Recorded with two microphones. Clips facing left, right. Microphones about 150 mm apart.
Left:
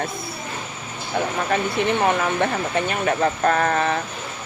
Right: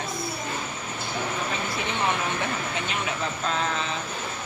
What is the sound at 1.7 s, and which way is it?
Speech, 55° left (ahead or behind).